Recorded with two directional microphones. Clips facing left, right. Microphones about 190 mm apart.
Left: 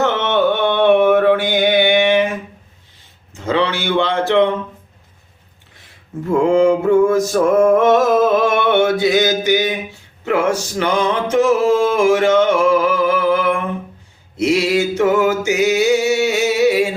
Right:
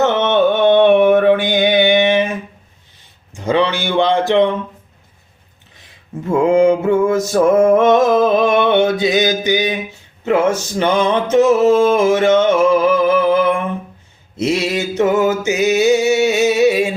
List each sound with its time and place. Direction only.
0.0 s mantra: 20° right (ahead or behind)
3.3 s speech: 15° right (ahead or behind)
6.5 s music: 20° right (ahead or behind)
14.3 s mantra: 25° right (ahead or behind)